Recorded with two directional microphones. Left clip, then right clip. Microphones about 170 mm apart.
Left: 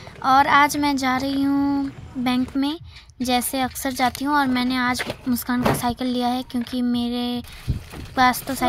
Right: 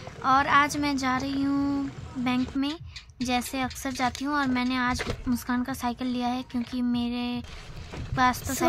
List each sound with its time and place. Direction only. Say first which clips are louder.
0.2 s a woman's voice: left 6 dB; 25° left (ahead or behind)